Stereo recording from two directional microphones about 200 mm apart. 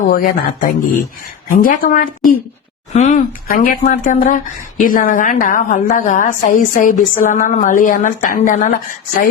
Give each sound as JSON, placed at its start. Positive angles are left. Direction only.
{"t": 0.1, "sound": "a woman's voice", "side_deg": 45}